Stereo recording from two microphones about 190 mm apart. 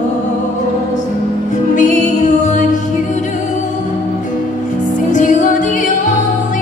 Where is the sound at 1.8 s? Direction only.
40° left (ahead or behind).